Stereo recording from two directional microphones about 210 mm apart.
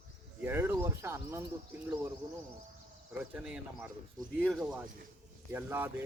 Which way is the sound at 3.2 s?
5° right (ahead or behind).